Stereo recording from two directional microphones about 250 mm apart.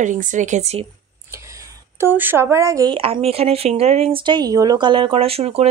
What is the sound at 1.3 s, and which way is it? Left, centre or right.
Speech, centre.